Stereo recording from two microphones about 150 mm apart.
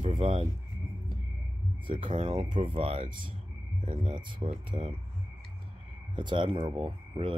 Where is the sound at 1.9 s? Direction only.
35° right (ahead or behind).